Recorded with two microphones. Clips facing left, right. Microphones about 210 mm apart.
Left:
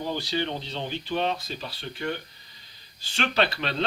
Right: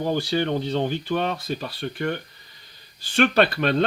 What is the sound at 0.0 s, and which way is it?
Speech, 50° right (ahead or behind).